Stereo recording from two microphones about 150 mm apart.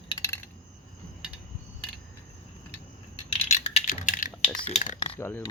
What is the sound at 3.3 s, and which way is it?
Coin, 45° left (ahead or behind).